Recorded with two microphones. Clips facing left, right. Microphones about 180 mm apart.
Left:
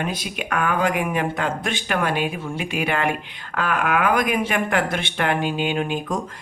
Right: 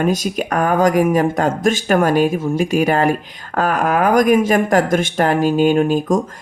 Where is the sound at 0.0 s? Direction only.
45° right (ahead or behind).